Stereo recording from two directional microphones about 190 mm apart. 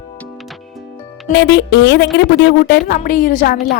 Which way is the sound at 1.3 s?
65° left (ahead or behind).